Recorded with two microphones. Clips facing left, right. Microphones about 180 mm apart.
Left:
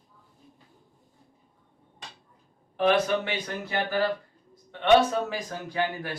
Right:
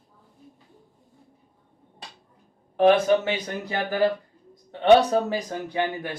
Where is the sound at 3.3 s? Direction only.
20° right (ahead or behind).